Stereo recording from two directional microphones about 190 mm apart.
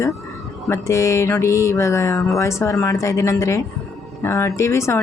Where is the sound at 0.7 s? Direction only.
15° left (ahead or behind).